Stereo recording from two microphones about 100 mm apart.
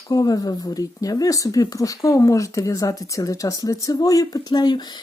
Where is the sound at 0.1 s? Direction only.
40° left (ahead or behind).